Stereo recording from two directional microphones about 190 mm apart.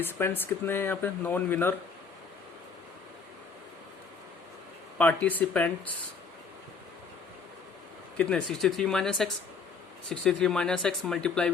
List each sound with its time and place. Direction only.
0.0 s speech: 10° left (ahead or behind)
4.9 s speech: 10° left (ahead or behind)
8.2 s speech: 5° left (ahead or behind)